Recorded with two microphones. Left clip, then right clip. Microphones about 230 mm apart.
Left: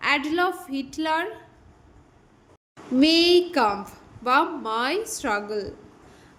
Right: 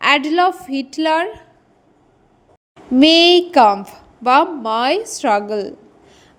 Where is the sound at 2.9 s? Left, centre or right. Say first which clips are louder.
Right 8 dB; right.